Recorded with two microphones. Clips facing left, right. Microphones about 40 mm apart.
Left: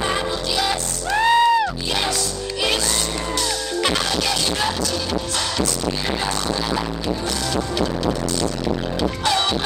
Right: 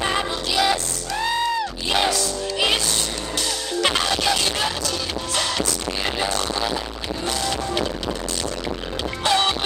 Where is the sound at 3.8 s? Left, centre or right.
Centre.